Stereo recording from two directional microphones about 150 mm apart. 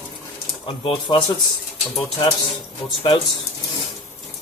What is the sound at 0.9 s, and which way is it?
Speech, 35° left (ahead or behind).